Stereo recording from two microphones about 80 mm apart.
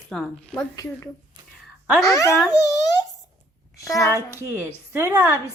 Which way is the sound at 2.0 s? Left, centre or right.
Left.